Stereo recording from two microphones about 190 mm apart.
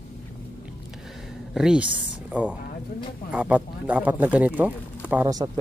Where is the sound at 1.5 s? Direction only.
5° right (ahead or behind).